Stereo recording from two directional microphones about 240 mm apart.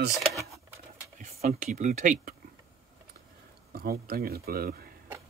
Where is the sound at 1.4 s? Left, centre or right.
Right.